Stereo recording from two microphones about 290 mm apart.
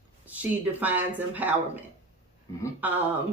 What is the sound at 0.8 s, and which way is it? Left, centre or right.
Speech, centre.